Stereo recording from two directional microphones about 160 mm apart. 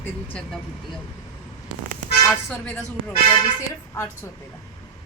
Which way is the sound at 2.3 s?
5° left (ahead or behind).